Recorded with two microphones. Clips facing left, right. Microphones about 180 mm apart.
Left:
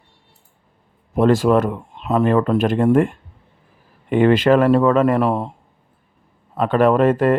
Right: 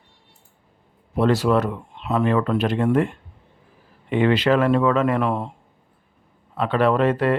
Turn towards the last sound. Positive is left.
turn(degrees=45)  # may be behind; listen again after turning